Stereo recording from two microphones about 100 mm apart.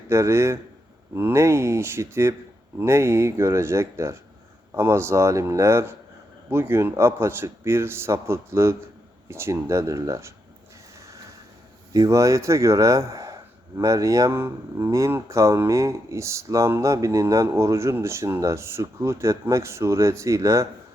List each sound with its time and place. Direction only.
0.1 s speech: 25° right (ahead or behind)
11.9 s speech: 30° right (ahead or behind)